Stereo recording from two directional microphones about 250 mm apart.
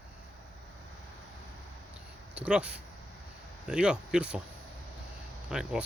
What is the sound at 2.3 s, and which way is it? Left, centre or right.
Speech, centre.